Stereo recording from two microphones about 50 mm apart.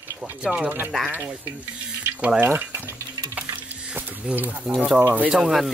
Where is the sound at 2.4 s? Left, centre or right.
Right.